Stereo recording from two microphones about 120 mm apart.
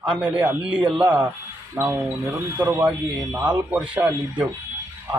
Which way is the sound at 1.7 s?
25° right (ahead or behind).